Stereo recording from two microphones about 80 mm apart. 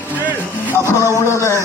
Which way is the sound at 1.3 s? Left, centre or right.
Left.